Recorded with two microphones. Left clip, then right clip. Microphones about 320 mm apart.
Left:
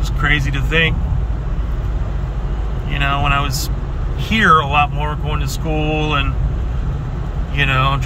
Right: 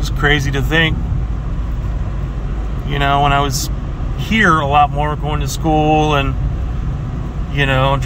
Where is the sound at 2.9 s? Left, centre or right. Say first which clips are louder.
Right 4 dB; centre.